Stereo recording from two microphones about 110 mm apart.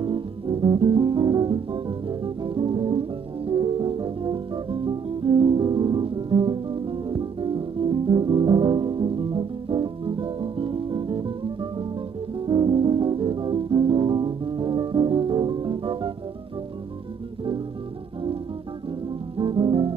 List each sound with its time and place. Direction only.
0.0 s music: 50° right (ahead or behind)
19.3 s music: 50° right (ahead or behind)